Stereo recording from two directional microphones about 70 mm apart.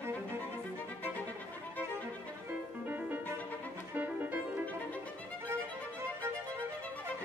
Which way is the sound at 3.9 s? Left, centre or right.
Right.